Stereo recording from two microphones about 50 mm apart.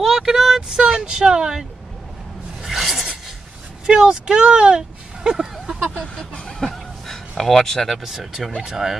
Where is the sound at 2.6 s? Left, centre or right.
Centre.